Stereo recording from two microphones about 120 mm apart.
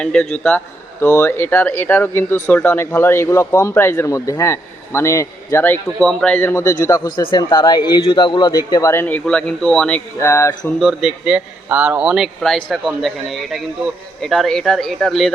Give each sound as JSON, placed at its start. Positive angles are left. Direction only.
{"t": 0.0, "sound": "speech", "side_deg": 5}
{"t": 1.1, "sound": "speech", "side_deg": 20}
{"t": 5.6, "sound": "speech", "side_deg": 10}
{"t": 7.2, "sound": "a man's voice", "side_deg": 40}
{"t": 10.2, "sound": "speech", "side_deg": 25}
{"t": 10.8, "sound": "a man's voice", "side_deg": -5}